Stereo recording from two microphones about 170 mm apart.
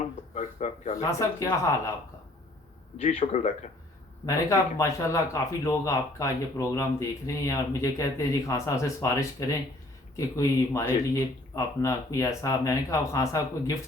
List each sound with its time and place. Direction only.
0.3 s speech: 45° left (ahead or behind)
3.0 s speech: 45° left (ahead or behind)
4.3 s speech: 20° left (ahead or behind)